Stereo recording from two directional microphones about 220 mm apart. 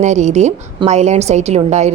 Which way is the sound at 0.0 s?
30° right (ahead or behind).